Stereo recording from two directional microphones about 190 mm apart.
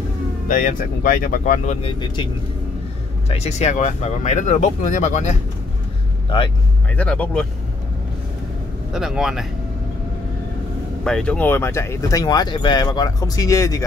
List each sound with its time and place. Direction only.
0.5 s speech: 45° left (ahead or behind); by 2.2 s 25° left (ahead or behind)
3.3 s speech: 35° left (ahead or behind)
6.9 s speech: 5° left (ahead or behind)
8.9 s speech: centre (ahead or behind)
11.1 s speech: 5° left (ahead or behind)